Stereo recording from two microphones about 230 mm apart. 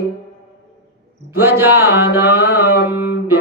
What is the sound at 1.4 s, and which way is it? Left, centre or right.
Speech, centre.